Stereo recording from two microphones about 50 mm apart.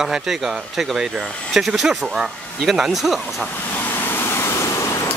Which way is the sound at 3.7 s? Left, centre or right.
Left.